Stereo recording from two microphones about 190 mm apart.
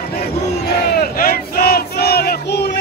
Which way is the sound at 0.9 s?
50° left (ahead or behind).